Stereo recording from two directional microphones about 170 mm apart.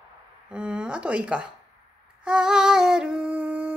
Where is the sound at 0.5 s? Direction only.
5° right (ahead or behind).